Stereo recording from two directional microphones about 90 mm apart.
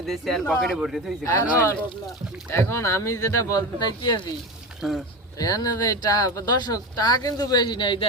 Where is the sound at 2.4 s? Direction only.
30° left (ahead or behind).